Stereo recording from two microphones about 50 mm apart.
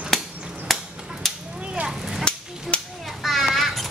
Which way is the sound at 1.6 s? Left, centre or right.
Right.